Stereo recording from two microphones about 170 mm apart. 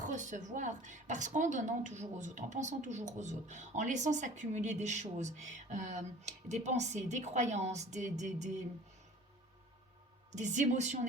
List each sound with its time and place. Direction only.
0.0 s a woman's voice: 45° right (ahead or behind)
10.3 s a woman's voice: 45° right (ahead or behind)